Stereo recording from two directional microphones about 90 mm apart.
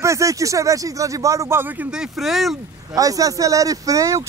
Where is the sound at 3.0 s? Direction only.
40° right (ahead or behind).